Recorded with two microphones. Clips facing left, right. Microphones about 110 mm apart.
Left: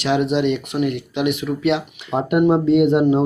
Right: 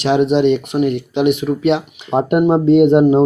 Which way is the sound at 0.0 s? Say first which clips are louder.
Right 5 dB; 20° right (ahead or behind).